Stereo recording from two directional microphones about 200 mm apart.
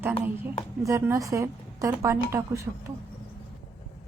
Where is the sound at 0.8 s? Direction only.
15° right (ahead or behind).